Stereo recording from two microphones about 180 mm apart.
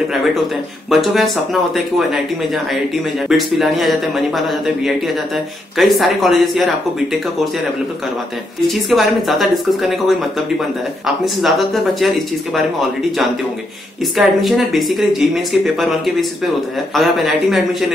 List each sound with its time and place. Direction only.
0.8 s speech: centre (ahead or behind)
8.9 s speech: centre (ahead or behind)
11.4 s speech: centre (ahead or behind)
14.1 s speech: centre (ahead or behind)